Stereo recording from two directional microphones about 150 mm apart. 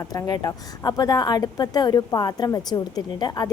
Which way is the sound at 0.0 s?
25° left (ahead or behind).